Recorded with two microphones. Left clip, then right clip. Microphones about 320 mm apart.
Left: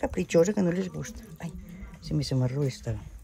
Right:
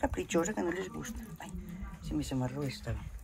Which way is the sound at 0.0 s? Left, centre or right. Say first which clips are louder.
Left 8 dB; left.